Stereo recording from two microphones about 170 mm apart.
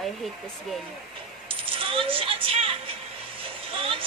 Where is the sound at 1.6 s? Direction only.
30° right (ahead or behind).